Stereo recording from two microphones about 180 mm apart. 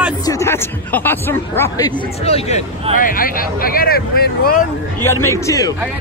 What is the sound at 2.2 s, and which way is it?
Speech, 35° left (ahead or behind).